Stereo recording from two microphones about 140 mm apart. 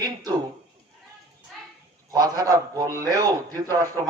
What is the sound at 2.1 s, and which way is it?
A man's voice, 25° right (ahead or behind).